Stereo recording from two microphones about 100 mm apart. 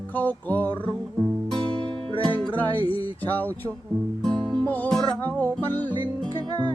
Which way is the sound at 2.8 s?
65° left (ahead or behind).